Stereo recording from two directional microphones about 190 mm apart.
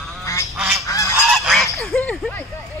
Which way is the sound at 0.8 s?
15° left (ahead or behind).